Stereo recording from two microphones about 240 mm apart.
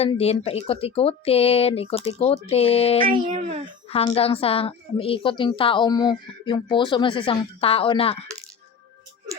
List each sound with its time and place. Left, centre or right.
0.0 s a woman's voice: left
3.1 s speech: right
3.8 s a woman's voice: left